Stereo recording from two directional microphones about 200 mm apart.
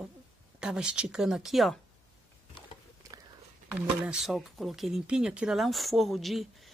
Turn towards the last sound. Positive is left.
turn(degrees=0)  # may be behind; listen again after turning